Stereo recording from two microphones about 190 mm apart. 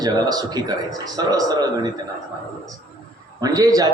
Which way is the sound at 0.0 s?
20° right (ahead or behind).